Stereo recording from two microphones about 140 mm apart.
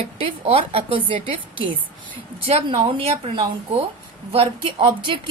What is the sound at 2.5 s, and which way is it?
A woman's voice, 45° right (ahead or behind).